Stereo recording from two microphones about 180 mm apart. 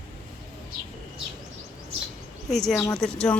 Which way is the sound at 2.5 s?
Centre (ahead or behind).